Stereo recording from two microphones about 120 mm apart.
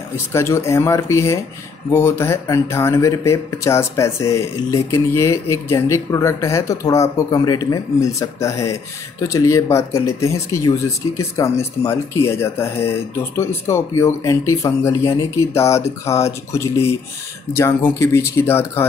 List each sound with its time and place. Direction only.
0.3 s speech: 20° left (ahead or behind)